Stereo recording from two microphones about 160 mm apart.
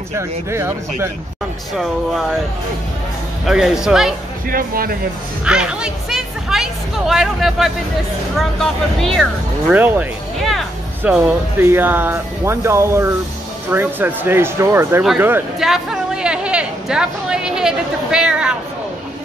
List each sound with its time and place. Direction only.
0.5 s speech: 15° right (ahead or behind)
3.4 s speech: centre (ahead or behind)
4.5 s speech: 65° right (ahead or behind)
5.4 s speech: 5° right (ahead or behind)
9.0 s speech: centre (ahead or behind)
9.8 s speech: 10° right (ahead or behind)
15.6 s a sound: 5° right (ahead or behind)